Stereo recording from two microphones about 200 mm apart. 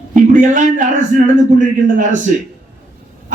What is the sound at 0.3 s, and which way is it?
Speech, 40° right (ahead or behind).